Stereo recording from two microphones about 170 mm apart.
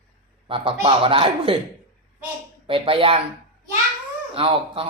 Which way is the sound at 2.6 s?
30° right (ahead or behind).